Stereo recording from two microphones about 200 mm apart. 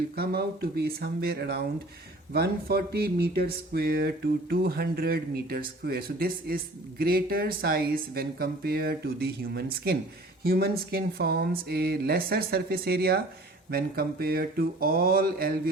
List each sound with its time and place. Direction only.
0.2 s speech: 50° right (ahead or behind)